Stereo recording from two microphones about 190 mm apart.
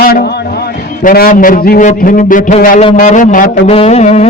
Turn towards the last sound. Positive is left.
turn(degrees=35)  # may be behind; listen again after turning